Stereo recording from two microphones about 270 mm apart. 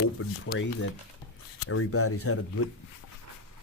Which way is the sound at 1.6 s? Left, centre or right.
Left.